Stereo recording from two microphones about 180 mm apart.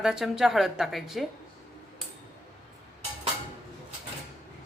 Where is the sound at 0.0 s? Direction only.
Centre (ahead or behind).